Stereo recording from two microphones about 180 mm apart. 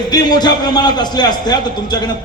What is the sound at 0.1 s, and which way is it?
A man's voice, 25° left (ahead or behind).